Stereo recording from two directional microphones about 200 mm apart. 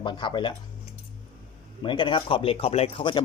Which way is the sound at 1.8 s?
25° left (ahead or behind).